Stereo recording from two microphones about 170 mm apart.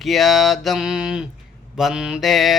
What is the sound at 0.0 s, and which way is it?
Mantra, centre (ahead or behind).